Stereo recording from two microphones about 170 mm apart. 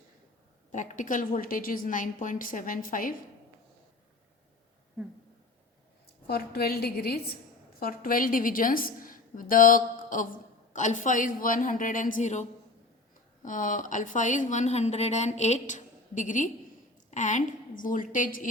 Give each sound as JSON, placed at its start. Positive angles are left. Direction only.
{"t": 0.7, "sound": "speech", "side_deg": 45}
{"t": 6.2, "sound": "a woman's voice", "side_deg": 65}